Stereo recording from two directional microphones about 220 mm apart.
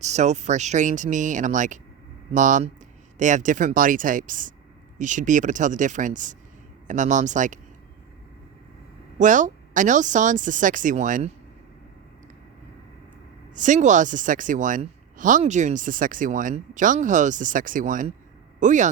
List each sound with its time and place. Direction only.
0.0 s a woman's voice: 30° right (ahead or behind)
9.1 s a woman's voice: 35° right (ahead or behind)
13.6 s a woman's voice: 35° right (ahead or behind)